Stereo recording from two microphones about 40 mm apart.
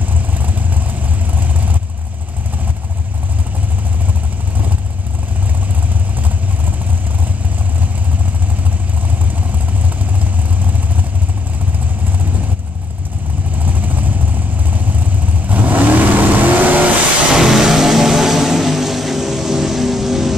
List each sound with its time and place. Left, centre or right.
1.3 s vehicle: right
13.7 s vehicle: right
15.4 s vehicle: right
17.3 s vehicle: centre